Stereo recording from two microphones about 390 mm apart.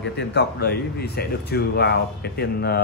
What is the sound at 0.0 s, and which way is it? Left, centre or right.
Speech, left.